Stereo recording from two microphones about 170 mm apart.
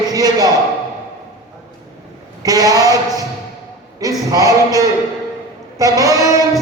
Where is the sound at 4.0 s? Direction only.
20° right (ahead or behind).